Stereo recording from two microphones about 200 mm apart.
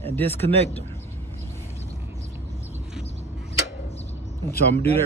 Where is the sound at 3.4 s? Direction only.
30° left (ahead or behind).